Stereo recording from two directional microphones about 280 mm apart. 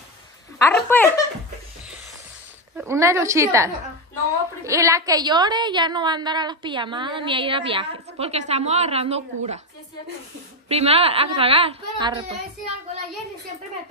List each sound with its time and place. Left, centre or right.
0.6 s a woman's voice: centre
2.8 s a woman's voice: centre
10.7 s speech: right